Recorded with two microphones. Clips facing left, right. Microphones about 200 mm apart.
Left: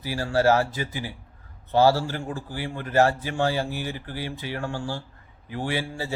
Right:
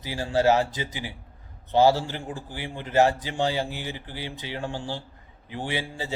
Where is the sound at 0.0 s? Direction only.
20° right (ahead or behind).